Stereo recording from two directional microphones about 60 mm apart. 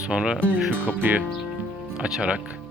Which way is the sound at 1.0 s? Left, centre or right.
Right.